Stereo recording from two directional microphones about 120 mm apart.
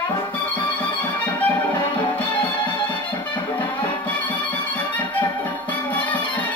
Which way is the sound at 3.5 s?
15° left (ahead or behind).